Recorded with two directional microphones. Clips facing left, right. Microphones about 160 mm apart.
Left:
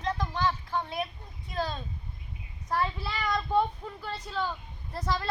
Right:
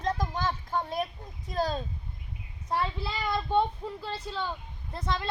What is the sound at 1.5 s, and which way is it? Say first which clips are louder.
Speech: right 3 dB; 40° right (ahead or behind).